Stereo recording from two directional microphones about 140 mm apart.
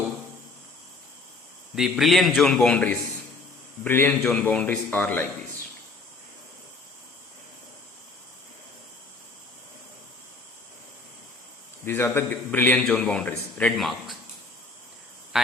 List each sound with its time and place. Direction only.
1.7 s a man's voice: centre (ahead or behind); by 4.1 s 15° left (ahead or behind)
4.2 s a man's voice: 5° left (ahead or behind)
11.9 s a man's voice: 15° left (ahead or behind)